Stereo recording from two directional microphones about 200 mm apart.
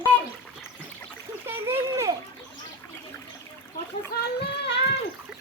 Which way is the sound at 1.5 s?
10° right (ahead or behind).